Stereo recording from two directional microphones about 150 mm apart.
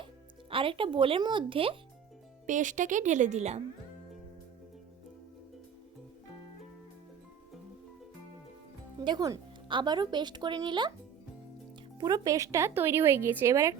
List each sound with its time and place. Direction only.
0.5 s speech: 35° right (ahead or behind)
2.5 s a woman's voice: 60° right (ahead or behind)
9.0 s speech: 25° right (ahead or behind)
11.9 s speech: 25° right (ahead or behind)